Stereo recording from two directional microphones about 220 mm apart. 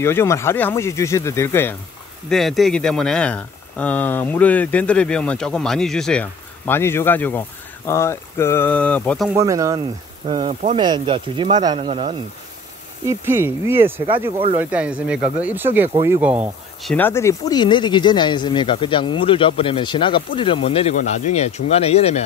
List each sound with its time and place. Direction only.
0.0 s speech: 10° left (ahead or behind)
9.3 s speech: 15° right (ahead or behind)
13.0 s speech: 10° right (ahead or behind)
16.9 s speech: 10° left (ahead or behind); by 22.2 s 30° left (ahead or behind)